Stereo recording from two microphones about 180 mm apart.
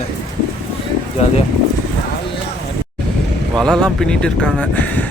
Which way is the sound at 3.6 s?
Centre (ahead or behind).